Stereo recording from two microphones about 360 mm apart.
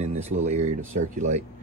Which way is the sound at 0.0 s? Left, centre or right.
Centre.